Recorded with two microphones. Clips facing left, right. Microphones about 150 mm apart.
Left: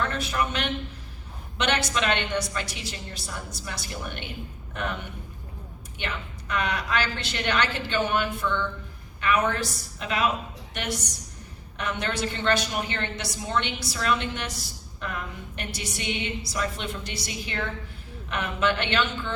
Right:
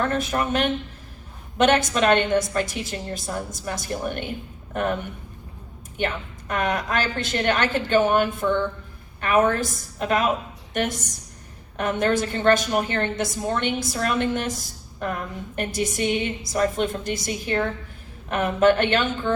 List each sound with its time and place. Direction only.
0.0 s a woman's voice: 45° right (ahead or behind)
6.0 s a woman's voice: 45° right (ahead or behind)